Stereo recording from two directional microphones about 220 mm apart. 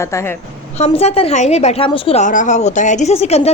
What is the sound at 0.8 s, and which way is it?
A woman's voice, 30° left (ahead or behind).